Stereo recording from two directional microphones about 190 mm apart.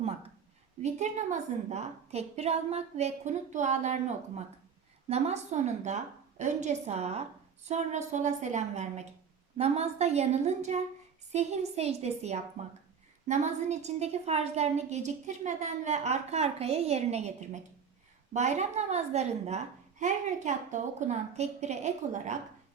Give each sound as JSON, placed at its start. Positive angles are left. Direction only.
{"t": 0.8, "sound": "a woman's voice", "side_deg": -35}